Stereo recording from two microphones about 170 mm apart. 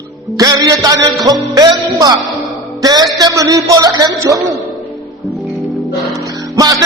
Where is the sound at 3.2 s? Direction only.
20° right (ahead or behind).